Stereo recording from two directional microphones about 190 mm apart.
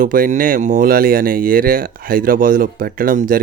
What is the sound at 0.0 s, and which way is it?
Speech, 45° right (ahead or behind).